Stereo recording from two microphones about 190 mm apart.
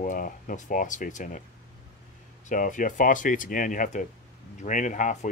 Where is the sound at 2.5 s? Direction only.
45° left (ahead or behind).